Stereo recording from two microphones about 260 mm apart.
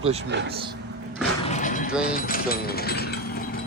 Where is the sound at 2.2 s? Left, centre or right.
Left.